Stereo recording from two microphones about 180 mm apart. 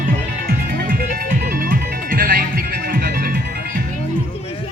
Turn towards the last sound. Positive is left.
turn(degrees=-60)  # may be behind; listen again after turning